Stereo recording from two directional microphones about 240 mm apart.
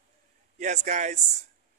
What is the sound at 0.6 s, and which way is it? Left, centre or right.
Speech, right.